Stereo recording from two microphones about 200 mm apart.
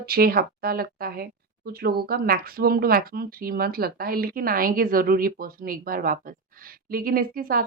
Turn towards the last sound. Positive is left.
turn(degrees=-45)  # may be behind; listen again after turning